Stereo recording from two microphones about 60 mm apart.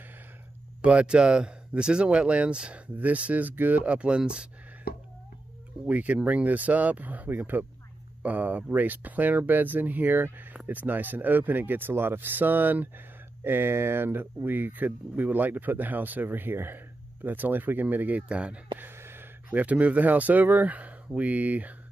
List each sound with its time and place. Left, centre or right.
0.8 s speech: centre
5.9 s speech: right
18.8 s gasp: right
19.5 s speech: right